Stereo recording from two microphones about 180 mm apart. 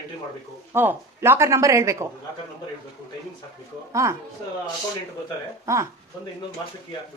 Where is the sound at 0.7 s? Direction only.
15° right (ahead or behind).